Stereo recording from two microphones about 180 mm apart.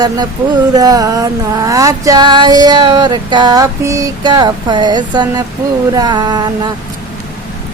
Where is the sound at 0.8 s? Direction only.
20° right (ahead or behind).